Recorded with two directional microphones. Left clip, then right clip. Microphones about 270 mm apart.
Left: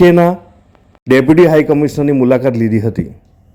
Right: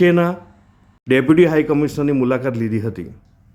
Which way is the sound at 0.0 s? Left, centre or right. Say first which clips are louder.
Left 7 dB; centre.